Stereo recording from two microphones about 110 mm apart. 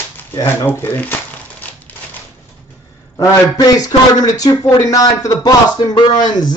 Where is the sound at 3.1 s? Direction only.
30° left (ahead or behind).